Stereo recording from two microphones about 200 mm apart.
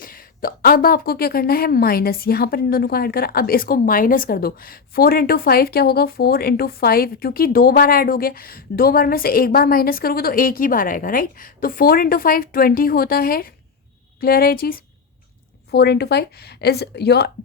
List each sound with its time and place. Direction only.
0.0 s a woman's voice: 45° left (ahead or behind)